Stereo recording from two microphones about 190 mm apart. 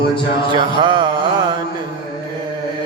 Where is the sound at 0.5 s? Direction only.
25° right (ahead or behind).